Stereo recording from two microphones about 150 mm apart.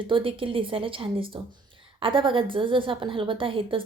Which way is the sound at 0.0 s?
35° right (ahead or behind).